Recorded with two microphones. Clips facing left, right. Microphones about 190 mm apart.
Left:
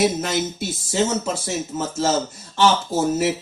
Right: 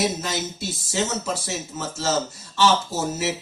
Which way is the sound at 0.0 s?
50° left (ahead or behind).